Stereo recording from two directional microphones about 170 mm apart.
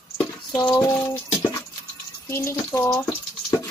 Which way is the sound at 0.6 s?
20° left (ahead or behind).